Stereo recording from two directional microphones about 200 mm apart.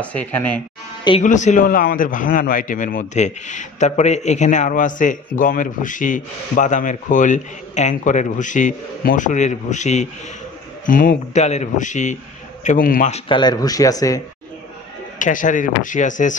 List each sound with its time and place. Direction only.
0.0 s speech: 5° left (ahead or behind)
1.2 s a man's voice: 40° left (ahead or behind)
13.3 s speech: 20° left (ahead or behind)
15.1 s a man's voice: 40° left (ahead or behind)